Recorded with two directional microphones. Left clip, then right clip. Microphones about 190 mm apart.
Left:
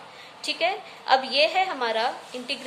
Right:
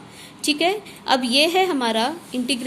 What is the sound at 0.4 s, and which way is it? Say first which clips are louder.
A woman's voice: right 5 dB; 50° right (ahead or behind).